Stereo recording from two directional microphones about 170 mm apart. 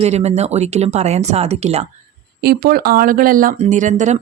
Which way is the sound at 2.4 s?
65° right (ahead or behind).